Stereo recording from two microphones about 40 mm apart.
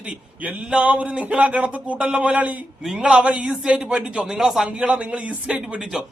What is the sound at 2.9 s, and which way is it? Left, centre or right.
A man's voice, right.